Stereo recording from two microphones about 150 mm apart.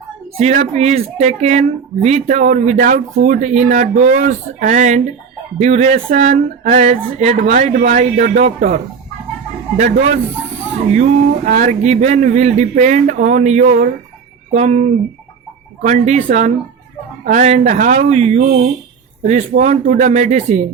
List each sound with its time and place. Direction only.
0.3 s a woman's voice: 50° right (ahead or behind)